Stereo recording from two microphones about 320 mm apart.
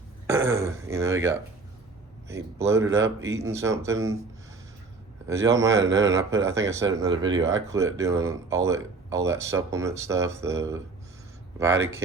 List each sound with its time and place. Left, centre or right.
0.3 s speech: centre
5.3 s speech: centre
5.6 s speech: right
5.9 s speech: centre